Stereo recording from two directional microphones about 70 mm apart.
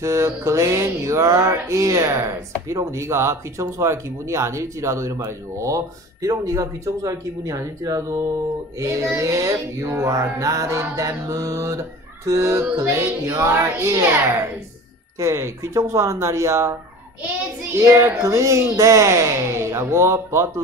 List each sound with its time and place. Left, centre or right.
0.0 s speech: right
8.7 s speech: right
12.8 s music: right
13.7 s speech: right
15.1 s speech: right
17.7 s speech: right